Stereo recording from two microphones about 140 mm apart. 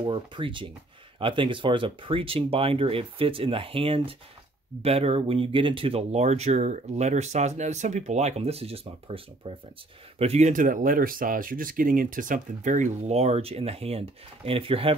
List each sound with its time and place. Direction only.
0.0 s speech: 35° right (ahead or behind)
10.5 s speech: 75° right (ahead or behind); by 15.0 s 40° right (ahead or behind)